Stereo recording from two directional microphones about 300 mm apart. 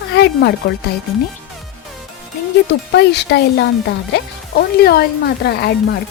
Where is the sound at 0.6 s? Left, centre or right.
Left.